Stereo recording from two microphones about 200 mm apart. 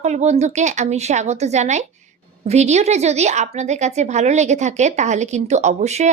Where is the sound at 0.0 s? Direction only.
35° right (ahead or behind).